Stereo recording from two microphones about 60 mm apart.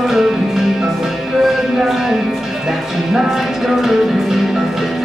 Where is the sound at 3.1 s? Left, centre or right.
Centre.